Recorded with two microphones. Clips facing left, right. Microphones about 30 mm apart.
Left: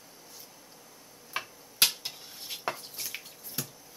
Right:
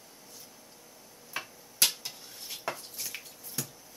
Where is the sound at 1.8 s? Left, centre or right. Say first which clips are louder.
Left 2 dB; left.